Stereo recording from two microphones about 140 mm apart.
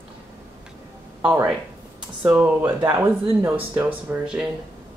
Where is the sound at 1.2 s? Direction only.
15° right (ahead or behind).